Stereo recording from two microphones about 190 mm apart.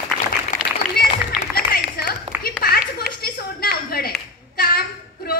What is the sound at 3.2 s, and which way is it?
Clapping, 55° left (ahead or behind).